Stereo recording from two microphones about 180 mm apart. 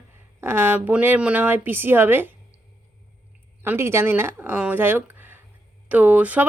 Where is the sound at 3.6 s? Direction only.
15° right (ahead or behind).